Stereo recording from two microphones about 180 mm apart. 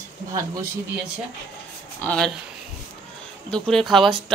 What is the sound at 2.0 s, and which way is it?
Speech, 5° left (ahead or behind).